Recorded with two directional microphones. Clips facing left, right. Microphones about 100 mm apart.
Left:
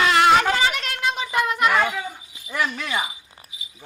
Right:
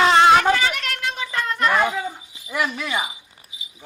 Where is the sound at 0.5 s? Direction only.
25° left (ahead or behind).